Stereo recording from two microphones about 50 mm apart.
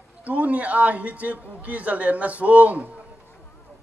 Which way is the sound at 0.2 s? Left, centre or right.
Right.